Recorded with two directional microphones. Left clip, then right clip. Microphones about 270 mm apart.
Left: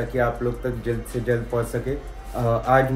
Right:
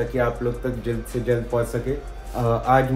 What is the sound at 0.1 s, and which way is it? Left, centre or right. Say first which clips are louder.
Speech: even; centre.